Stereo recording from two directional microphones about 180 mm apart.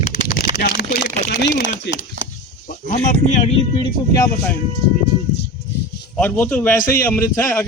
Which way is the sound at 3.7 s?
20° left (ahead or behind).